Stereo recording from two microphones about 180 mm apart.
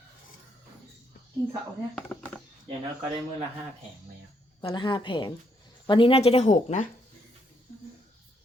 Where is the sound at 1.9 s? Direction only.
10° left (ahead or behind).